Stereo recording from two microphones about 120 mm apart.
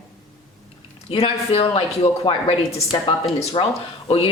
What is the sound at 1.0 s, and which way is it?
A woman's voice, 55° left (ahead or behind).